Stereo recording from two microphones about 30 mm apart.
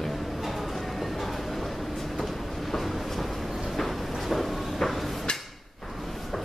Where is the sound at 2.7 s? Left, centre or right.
Centre.